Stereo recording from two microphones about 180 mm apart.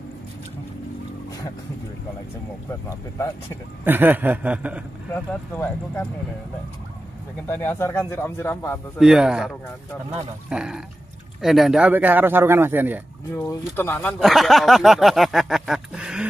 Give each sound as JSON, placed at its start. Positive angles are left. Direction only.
{"t": 2.9, "sound": "speech", "side_deg": 15}
{"t": 3.8, "sound": "speech", "side_deg": -10}
{"t": 5.1, "sound": "speech", "side_deg": 10}
{"t": 7.4, "sound": "speech", "side_deg": 15}
{"t": 8.9, "sound": "speech", "side_deg": -5}
{"t": 10.5, "sound": "speech", "side_deg": -5}
{"t": 13.3, "sound": "speech", "side_deg": 15}